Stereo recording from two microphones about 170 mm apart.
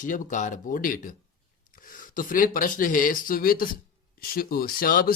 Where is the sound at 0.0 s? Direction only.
50° left (ahead or behind).